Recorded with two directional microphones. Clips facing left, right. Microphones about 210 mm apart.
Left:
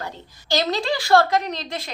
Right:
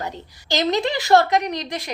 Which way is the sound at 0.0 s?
20° right (ahead or behind).